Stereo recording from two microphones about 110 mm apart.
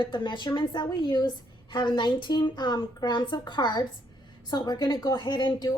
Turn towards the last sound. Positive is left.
turn(degrees=40)  # may be behind; listen again after turning